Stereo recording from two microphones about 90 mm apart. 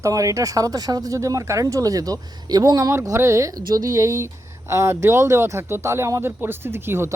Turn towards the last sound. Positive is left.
turn(degrees=-25)  # may be behind; listen again after turning